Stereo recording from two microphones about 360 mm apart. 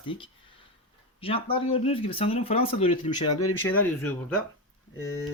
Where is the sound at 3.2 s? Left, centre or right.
Left.